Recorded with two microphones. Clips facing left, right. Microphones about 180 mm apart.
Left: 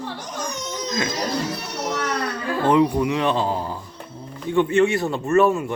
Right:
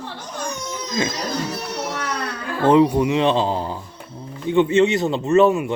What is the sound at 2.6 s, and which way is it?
Speech, 25° right (ahead or behind).